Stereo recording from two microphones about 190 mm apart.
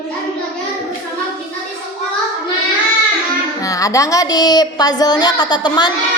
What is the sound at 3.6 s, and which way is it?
A woman's voice, 20° left (ahead or behind).